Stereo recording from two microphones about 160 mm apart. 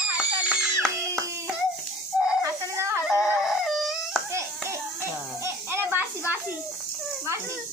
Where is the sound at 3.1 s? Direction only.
Centre (ahead or behind).